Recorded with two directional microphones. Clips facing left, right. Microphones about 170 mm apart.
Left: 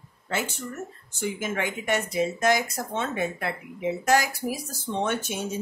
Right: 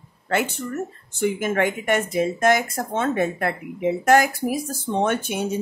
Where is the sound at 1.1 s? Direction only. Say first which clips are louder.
Right 7 dB; 60° right (ahead or behind).